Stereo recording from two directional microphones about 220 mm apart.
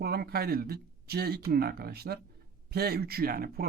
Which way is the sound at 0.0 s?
45° right (ahead or behind).